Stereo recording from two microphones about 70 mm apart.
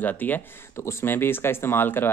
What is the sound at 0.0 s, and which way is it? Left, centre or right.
Speech, left.